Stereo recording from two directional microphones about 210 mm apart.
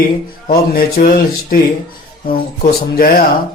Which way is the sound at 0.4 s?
40° left (ahead or behind).